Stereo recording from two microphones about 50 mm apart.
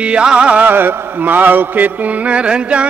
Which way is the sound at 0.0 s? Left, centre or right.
Centre.